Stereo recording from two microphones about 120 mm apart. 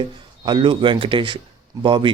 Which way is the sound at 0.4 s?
45° right (ahead or behind).